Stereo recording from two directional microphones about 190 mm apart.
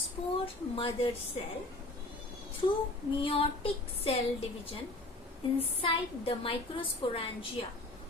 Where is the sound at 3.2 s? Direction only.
30° left (ahead or behind).